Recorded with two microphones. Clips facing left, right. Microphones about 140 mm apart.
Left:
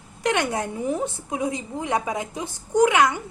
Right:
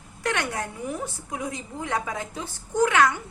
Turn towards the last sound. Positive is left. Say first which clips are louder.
# left 3 dB
turn(degrees=15)  # may be behind; listen again after turning